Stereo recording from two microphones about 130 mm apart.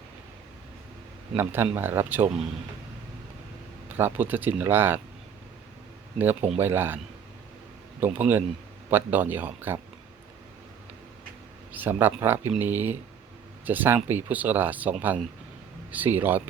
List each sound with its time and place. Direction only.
1.4 s speech: 15° right (ahead or behind)
3.8 s speech: 15° right (ahead or behind)
6.6 s speech: 15° right (ahead or behind)
8.0 s speech: 15° right (ahead or behind)
11.7 s speech: 15° right (ahead or behind)